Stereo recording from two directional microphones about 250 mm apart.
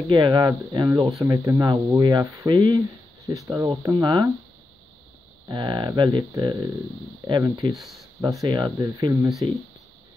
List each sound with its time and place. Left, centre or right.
0.1 s speech: centre
5.5 s speech: centre